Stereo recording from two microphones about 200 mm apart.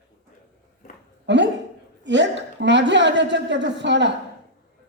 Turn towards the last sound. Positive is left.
turn(degrees=-60)  # may be behind; listen again after turning